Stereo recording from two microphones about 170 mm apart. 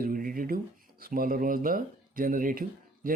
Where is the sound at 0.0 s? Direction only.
55° right (ahead or behind).